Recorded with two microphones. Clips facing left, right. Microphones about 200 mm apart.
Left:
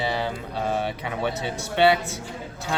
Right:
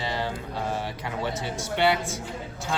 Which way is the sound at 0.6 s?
65° left (ahead or behind).